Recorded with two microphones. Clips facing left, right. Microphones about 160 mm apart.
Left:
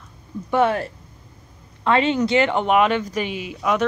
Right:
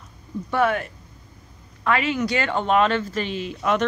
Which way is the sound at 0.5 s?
25° left (ahead or behind).